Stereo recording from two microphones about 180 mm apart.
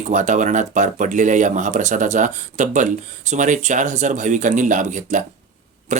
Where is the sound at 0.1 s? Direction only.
45° right (ahead or behind).